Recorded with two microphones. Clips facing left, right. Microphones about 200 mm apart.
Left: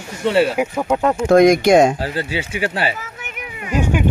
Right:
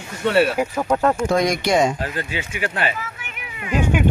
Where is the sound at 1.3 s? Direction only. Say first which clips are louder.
Left 8 dB; 50° left (ahead or behind).